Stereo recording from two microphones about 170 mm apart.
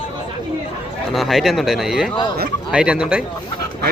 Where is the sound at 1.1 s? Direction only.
Centre (ahead or behind).